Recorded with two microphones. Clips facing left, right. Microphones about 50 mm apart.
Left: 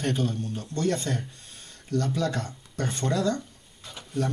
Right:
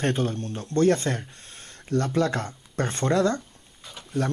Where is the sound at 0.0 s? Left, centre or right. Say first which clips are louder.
Right 2 dB; right.